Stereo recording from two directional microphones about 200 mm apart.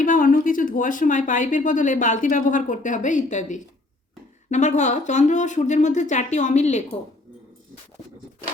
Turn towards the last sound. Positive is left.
turn(degrees=35)  # may be behind; listen again after turning